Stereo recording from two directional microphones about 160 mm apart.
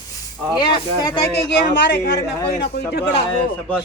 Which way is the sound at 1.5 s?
90° left.